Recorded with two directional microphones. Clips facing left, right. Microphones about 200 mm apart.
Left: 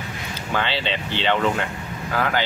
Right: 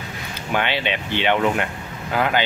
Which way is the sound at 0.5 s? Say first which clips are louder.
Right 2 dB; 15° right (ahead or behind).